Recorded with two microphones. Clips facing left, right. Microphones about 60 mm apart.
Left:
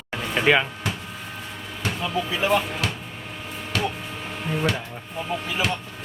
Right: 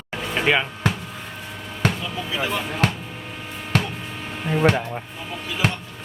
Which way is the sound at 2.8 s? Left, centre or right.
Right.